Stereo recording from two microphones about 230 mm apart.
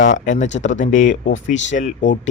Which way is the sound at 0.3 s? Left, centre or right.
Left.